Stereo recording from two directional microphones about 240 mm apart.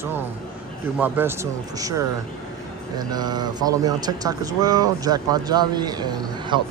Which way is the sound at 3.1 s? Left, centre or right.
Centre.